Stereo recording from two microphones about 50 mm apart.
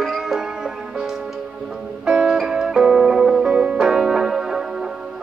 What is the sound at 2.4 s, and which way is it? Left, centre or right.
Music, centre.